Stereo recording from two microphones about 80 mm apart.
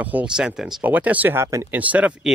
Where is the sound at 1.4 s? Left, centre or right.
Right.